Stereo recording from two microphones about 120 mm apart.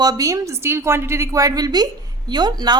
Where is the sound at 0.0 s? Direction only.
30° right (ahead or behind).